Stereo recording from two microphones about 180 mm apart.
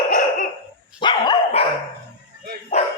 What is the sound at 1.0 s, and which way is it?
Dog, 25° left (ahead or behind).